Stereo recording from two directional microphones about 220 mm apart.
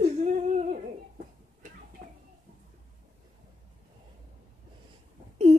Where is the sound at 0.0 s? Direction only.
30° right (ahead or behind).